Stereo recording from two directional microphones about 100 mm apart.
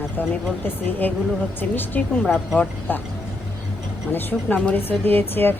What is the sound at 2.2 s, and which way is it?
Speech, 5° right (ahead or behind).